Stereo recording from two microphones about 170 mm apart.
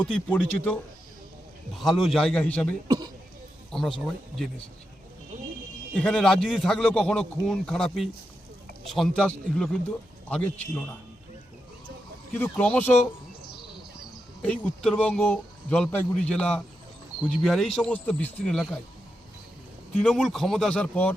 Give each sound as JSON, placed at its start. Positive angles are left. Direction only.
{"t": 0.3, "sound": "speech", "side_deg": 10}
{"t": 1.7, "sound": "a man's voice", "side_deg": 0}
{"t": 2.8, "sound": "a man's voice", "side_deg": -25}
{"t": 3.7, "sound": "speech", "side_deg": 0}
{"t": 5.9, "sound": "a man's voice", "side_deg": 5}
{"t": 12.3, "sound": "speech", "side_deg": 10}
{"t": 14.4, "sound": "a man's voice", "side_deg": 5}
{"t": 20.0, "sound": "a man's voice", "side_deg": 5}